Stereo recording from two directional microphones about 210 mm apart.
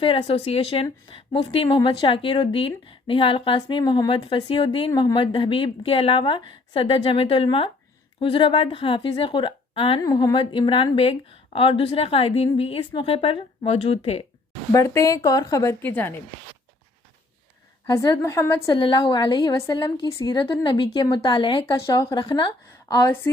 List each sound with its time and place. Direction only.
0.0 s a woman's voice: 25° left (ahead or behind)
14.7 s a woman's voice: 15° left (ahead or behind)
17.8 s a woman's voice: 20° left (ahead or behind)